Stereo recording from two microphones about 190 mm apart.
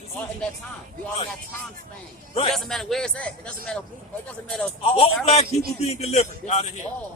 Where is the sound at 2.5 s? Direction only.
Centre (ahead or behind).